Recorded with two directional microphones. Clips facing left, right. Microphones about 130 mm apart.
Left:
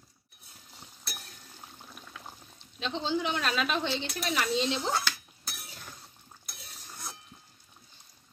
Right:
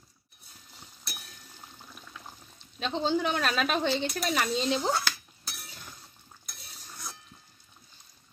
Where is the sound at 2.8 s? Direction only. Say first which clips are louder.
Right 3 dB; 45° right (ahead or behind).